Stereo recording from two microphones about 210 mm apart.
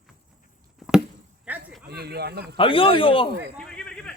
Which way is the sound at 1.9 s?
50° right (ahead or behind).